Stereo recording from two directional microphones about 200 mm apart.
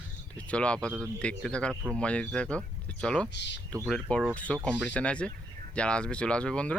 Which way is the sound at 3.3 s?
60° left (ahead or behind).